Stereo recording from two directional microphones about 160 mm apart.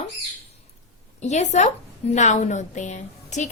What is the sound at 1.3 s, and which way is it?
Speech, 45° left (ahead or behind).